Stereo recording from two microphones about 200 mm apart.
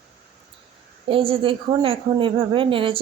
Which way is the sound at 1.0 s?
25° right (ahead or behind).